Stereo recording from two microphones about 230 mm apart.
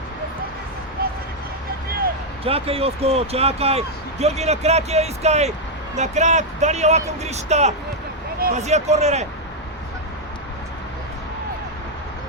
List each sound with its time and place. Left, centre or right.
2.4 s speech: right